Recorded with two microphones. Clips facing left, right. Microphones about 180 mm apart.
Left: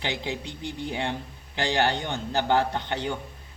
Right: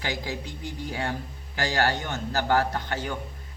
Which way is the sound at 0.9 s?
25° left (ahead or behind).